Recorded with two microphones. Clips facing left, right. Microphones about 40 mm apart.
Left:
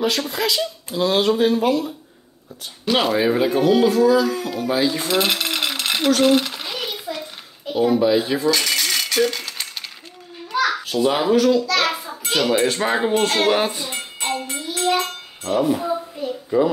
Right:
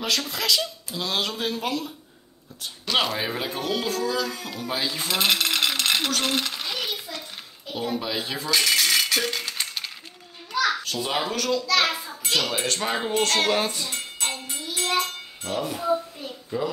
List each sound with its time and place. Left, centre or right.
0.0 s speech: centre
7.7 s rattle: centre
10.5 s a child's voice: centre
14.3 s music: left
14.8 s a sound: centre
15.7 s a child's voice: left